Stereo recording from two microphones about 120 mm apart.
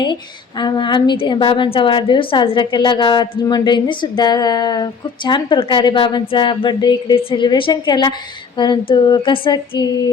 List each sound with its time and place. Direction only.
0.0 s a woman's voice: 40° left (ahead or behind)